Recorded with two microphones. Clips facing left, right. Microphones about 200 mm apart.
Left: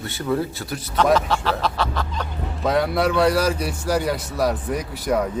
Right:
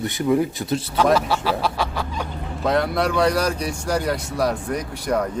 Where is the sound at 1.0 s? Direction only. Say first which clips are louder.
Left 1 dB; 10° right (ahead or behind).